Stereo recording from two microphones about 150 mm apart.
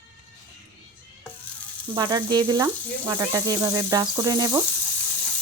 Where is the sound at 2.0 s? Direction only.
30° right (ahead or behind).